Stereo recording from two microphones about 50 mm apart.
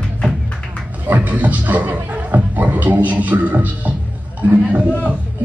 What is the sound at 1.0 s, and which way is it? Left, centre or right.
Speech, right.